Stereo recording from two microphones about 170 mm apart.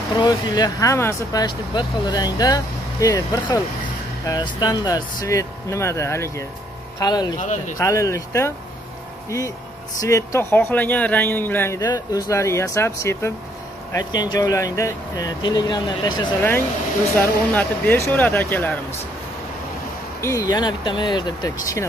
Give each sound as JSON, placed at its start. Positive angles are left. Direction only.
{"t": 0.1, "sound": "speech", "side_deg": 25}
{"t": 7.3, "sound": "speech", "side_deg": 45}
{"t": 7.8, "sound": "speech", "side_deg": 20}
{"t": 9.9, "sound": "speech", "side_deg": 20}
{"t": 17.2, "sound": "speech", "side_deg": 10}
{"t": 20.2, "sound": "speech", "side_deg": 15}